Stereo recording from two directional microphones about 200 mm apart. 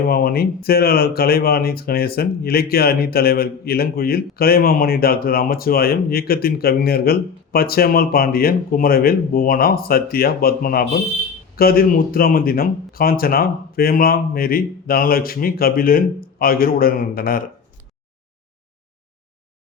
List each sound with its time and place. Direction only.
0.1 s speech: 50° left (ahead or behind)